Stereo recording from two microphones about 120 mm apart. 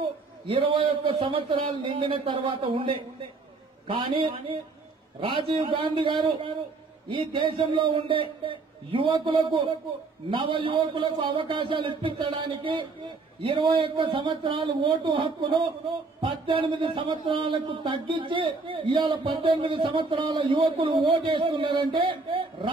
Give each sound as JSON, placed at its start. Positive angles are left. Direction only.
{"t": 0.0, "sound": "a man's voice", "side_deg": -50}